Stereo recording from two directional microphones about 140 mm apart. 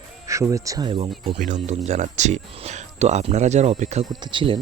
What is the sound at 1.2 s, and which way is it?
Speech, 65° right (ahead or behind).